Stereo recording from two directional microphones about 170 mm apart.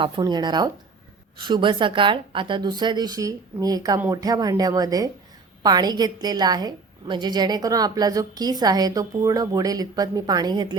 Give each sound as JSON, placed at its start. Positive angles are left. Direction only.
{"t": 0.0, "sound": "a woman's voice", "side_deg": -25}